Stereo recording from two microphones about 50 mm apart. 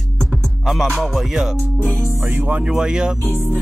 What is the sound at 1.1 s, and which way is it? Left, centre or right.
Music, centre.